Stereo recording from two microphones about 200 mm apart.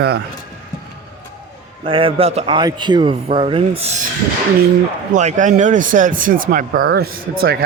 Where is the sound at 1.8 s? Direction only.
25° right (ahead or behind).